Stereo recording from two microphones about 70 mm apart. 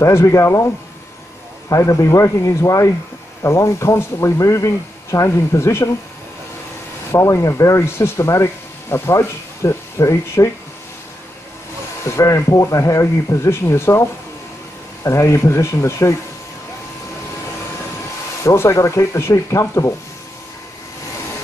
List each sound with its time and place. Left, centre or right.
0.0 s speech: left
1.7 s speech: left
7.1 s speech: left
12.1 s speech: left
15.0 s speech: left
18.4 s speech: left